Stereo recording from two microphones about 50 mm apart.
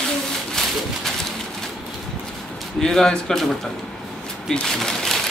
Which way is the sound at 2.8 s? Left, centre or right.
Centre.